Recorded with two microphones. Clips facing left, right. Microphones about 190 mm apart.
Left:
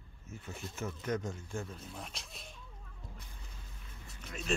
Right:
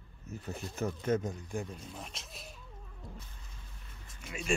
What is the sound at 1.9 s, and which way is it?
Speech, centre (ahead or behind).